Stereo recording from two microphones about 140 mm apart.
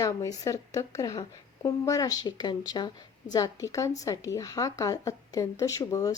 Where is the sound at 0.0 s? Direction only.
25° left (ahead or behind).